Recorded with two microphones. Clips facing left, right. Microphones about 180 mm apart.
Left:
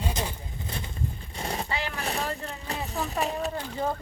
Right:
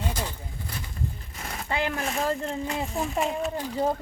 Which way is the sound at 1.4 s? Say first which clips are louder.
Left 5 dB; 30° left (ahead or behind).